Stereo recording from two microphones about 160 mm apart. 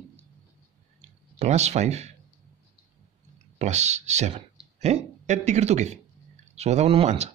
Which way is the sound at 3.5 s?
45° right (ahead or behind).